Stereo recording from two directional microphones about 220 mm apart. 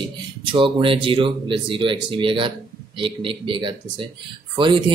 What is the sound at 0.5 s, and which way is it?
Speech, 25° right (ahead or behind).